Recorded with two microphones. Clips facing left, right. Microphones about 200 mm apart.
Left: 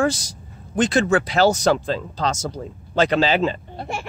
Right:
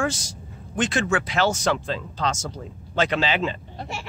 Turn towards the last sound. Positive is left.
turn(degrees=40)  # may be behind; listen again after turning